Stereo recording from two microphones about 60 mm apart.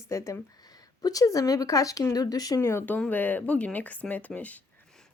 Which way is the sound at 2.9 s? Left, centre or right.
Left.